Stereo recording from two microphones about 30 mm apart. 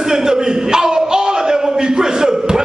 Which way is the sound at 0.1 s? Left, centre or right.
Right.